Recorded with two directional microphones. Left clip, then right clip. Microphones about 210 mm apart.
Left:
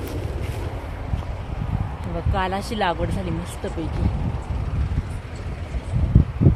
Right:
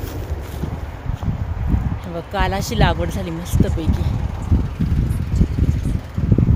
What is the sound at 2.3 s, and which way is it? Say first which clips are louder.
Speech: right 3 dB; 35° right (ahead or behind).